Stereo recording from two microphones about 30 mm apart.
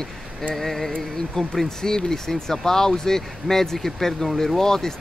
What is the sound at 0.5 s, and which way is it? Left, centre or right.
Speech, centre.